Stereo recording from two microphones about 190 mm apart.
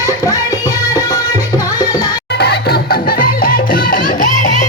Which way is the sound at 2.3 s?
60° left (ahead or behind).